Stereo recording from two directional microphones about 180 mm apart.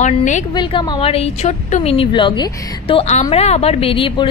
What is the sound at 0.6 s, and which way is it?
A woman's voice, 25° left (ahead or behind).